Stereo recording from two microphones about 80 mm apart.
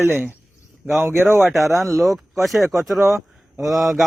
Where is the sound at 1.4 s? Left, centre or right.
Centre.